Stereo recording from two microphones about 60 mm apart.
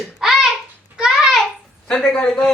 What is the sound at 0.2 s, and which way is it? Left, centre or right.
Babbling, centre.